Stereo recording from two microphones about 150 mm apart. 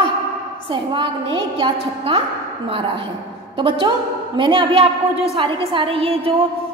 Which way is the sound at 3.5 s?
35° right (ahead or behind).